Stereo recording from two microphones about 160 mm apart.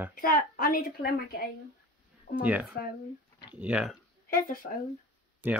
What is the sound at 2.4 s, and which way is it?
Speech, 10° right (ahead or behind).